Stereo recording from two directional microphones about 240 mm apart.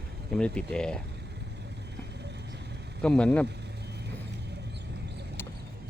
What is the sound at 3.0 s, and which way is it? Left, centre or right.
Speech, centre.